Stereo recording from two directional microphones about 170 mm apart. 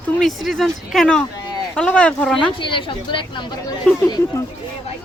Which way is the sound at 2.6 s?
30° left (ahead or behind).